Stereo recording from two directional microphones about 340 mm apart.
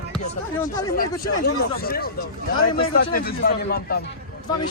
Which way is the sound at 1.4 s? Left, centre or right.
Left.